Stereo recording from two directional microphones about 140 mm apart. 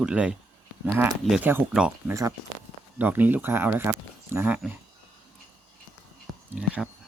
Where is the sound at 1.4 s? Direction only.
15° right (ahead or behind).